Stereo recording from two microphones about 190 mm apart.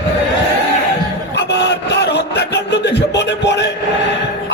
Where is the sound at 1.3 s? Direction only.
65° left (ahead or behind).